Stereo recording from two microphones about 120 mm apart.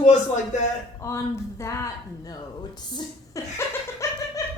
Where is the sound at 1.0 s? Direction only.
25° left (ahead or behind).